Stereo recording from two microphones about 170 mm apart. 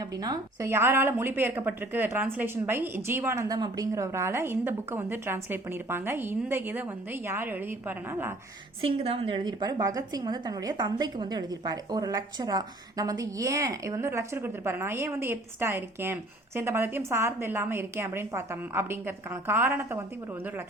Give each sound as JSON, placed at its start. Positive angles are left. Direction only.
{"t": 0.2, "sound": "a woman's voice", "side_deg": -20}
{"t": 8.8, "sound": "a woman's voice", "side_deg": -30}